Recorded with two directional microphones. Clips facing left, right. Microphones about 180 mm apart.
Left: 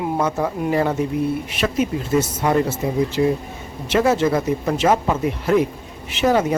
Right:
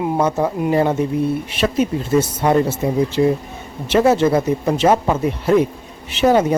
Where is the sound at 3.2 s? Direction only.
30° right (ahead or behind).